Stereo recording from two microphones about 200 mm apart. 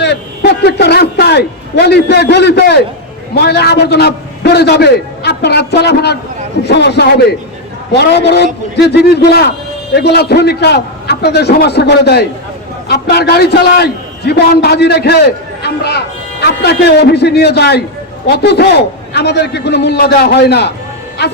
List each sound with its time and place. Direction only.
0.0 s a man's voice: 55° left (ahead or behind)